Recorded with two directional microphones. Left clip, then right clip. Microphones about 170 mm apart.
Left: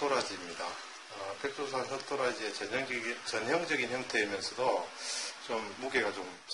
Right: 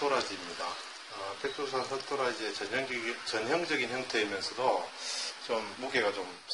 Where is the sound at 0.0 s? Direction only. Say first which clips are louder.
Right 1 dB; centre (ahead or behind).